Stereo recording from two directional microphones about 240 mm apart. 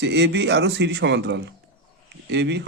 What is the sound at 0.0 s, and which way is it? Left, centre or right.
Speech, right.